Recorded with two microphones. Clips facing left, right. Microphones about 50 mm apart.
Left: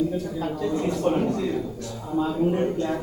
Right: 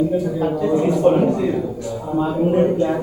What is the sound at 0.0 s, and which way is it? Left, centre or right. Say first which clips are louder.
A man's voice: right 7 dB; centre.